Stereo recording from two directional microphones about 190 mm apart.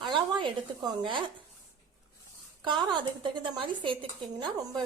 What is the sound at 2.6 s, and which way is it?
A woman's voice, 25° right (ahead or behind).